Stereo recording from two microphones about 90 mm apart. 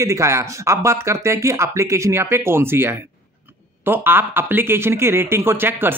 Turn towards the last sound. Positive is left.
turn(degrees=-25)  # may be behind; listen again after turning